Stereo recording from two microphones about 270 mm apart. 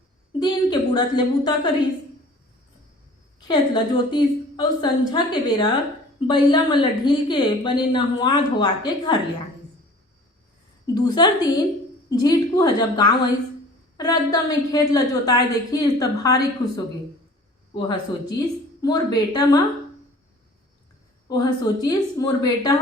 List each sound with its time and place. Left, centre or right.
0.3 s a woman's voice: centre
3.4 s a woman's voice: centre
10.8 s a woman's voice: centre
21.2 s a woman's voice: centre